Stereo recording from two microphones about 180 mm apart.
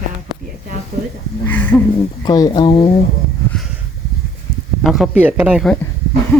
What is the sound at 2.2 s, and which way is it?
Speech, 20° left (ahead or behind).